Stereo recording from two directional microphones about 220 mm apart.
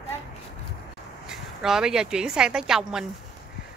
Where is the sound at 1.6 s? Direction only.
Centre (ahead or behind).